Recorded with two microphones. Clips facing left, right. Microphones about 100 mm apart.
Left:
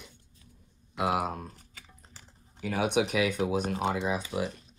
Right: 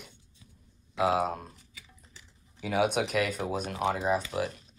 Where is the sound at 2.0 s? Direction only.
35° left (ahead or behind).